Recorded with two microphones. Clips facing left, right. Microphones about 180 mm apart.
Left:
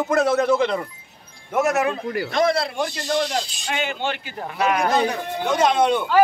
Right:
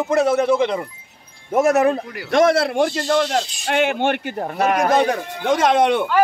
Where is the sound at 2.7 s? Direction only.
55° right (ahead or behind).